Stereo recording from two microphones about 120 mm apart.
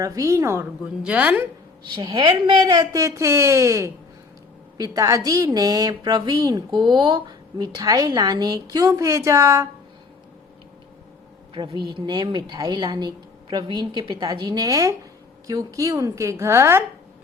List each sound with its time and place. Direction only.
0.0 s a woman's voice: 25° right (ahead or behind)
1.0 s a woman's voice: 10° right (ahead or behind)
2.0 s a woman's voice: 40° right (ahead or behind); by 9.6 s 25° right (ahead or behind)
11.5 s a woman's voice: 40° right (ahead or behind); by 16.8 s 20° right (ahead or behind)